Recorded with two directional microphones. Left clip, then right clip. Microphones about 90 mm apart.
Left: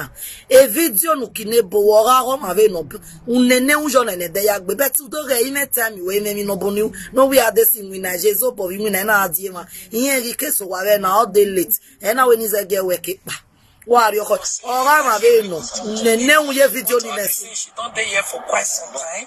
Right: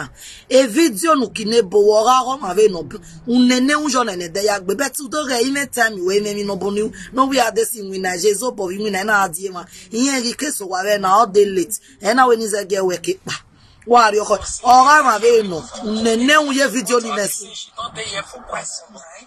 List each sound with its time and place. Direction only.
0.0 s music: 35° right (ahead or behind)
15.2 s speech: 50° left (ahead or behind)
16.0 s music: 45° right (ahead or behind)
17.7 s speech: 90° left